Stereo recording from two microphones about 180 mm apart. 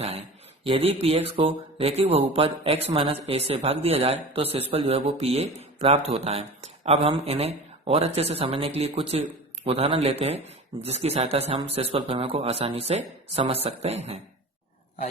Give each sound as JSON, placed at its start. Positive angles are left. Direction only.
{"t": 0.0, "sound": "speech", "side_deg": -35}